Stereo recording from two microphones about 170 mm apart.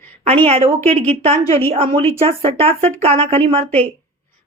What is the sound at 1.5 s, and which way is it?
A woman's voice, 35° right (ahead or behind).